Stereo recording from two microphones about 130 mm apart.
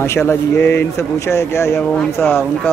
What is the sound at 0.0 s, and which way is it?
Speech, 20° left (ahead or behind).